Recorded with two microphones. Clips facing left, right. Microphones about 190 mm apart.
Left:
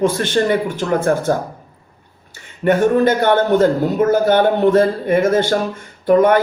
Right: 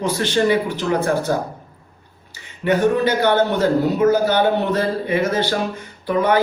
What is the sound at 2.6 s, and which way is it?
A man's voice, 50° left (ahead or behind).